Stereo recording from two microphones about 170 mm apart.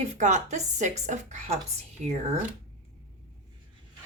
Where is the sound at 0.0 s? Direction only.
40° right (ahead or behind).